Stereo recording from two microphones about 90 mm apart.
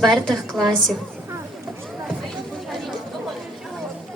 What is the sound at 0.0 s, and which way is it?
Speech, 5° left (ahead or behind).